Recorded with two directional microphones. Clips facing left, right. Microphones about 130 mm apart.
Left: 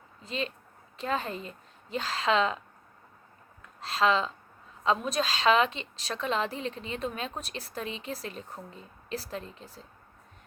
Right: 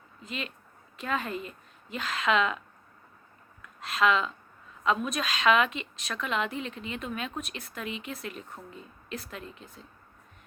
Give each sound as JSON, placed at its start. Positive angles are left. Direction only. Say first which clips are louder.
{"t": 0.2, "sound": "a woman's voice", "louder": "left 4 dB", "side_deg": 30}
{"t": 3.6, "sound": "a sound", "louder": "even", "side_deg": 30}
{"t": 4.8, "sound": "a woman's voice", "louder": "left 1 dB", "side_deg": 30}